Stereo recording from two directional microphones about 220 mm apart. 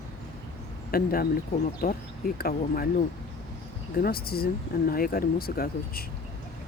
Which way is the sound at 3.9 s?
45° left (ahead or behind).